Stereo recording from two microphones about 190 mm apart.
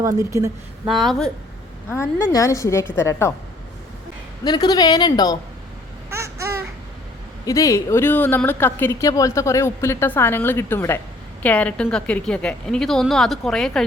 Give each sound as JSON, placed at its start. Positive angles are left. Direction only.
{"t": 0.0, "sound": "a woman's voice", "side_deg": -15}
{"t": 0.9, "sound": "a woman's voice", "side_deg": 0}
{"t": 1.9, "sound": "speech", "side_deg": 15}
{"t": 4.4, "sound": "a woman's voice", "side_deg": 20}
{"t": 6.1, "sound": "babbling", "side_deg": -15}
{"t": 7.4, "sound": "a woman's voice", "side_deg": 15}